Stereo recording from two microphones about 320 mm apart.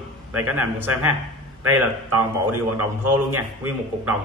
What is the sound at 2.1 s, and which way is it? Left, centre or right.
Speech, right.